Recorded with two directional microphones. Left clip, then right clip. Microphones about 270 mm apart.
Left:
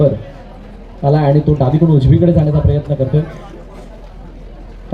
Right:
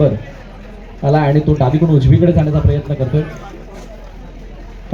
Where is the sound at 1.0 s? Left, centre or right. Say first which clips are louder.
Left 1 dB; left.